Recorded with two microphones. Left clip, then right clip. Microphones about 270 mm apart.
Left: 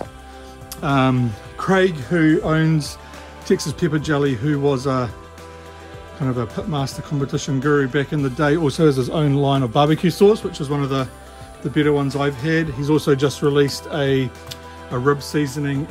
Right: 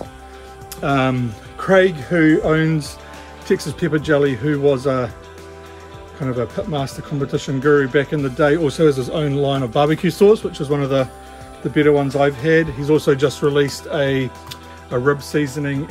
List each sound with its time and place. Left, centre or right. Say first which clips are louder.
0.8 s speech: even; centre
6.7 s speech: right 2 dB; centre